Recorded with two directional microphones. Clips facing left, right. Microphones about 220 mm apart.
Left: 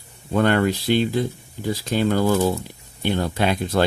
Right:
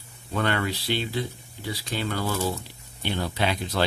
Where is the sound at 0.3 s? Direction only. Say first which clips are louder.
Left 8 dB; 45° left (ahead or behind).